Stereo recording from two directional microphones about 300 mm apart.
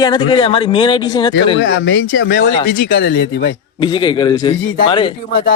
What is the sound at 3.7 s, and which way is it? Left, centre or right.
Speech, centre.